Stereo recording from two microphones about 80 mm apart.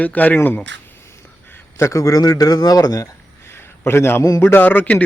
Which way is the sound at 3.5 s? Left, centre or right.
Left.